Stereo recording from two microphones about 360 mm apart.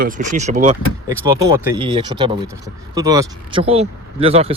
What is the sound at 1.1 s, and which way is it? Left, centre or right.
Speech, centre.